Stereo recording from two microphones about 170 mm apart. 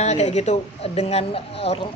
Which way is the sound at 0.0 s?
40° left (ahead or behind).